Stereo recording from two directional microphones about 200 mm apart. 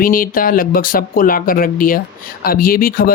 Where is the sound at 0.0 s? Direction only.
45° left (ahead or behind).